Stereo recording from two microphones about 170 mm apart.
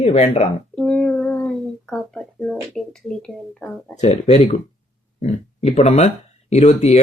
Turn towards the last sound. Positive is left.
turn(degrees=40)  # may be behind; listen again after turning